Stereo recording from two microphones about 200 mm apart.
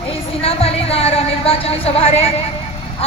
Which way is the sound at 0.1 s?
30° left (ahead or behind).